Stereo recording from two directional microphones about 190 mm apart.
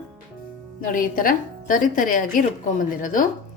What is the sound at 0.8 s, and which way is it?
A woman's voice, 45° left (ahead or behind).